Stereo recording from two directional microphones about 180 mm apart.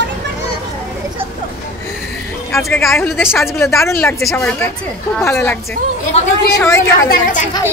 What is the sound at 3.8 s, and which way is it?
Speech, 15° left (ahead or behind).